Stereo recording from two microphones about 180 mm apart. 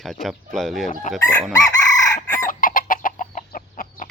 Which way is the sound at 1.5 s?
20° left (ahead or behind).